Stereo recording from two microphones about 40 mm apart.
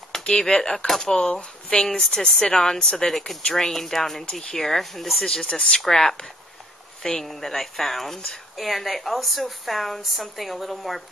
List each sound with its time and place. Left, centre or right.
0.2 s speech: left
1.1 s speech: left
1.9 s speech: centre
4.6 s speech: centre
5.2 s speech: centre